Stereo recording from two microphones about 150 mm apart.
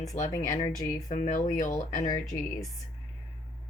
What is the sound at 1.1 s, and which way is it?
Speech, 60° left (ahead or behind).